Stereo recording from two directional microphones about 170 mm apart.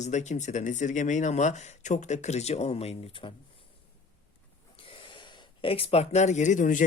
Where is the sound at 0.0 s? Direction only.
45° left (ahead or behind).